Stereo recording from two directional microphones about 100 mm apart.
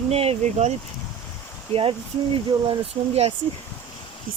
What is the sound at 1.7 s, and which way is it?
Speech, 70° right (ahead or behind).